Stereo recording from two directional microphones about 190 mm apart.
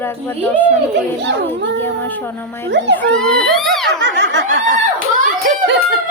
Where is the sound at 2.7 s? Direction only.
65° right (ahead or behind).